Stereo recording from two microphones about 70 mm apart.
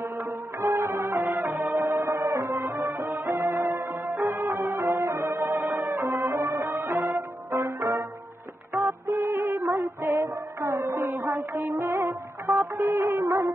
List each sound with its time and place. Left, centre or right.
0.6 s music: right
6.6 s music: right
7.0 s music: right
8.8 s music: right
9.3 s music: right